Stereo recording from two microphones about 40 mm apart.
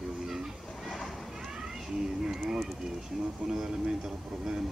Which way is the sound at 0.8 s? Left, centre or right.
Centre.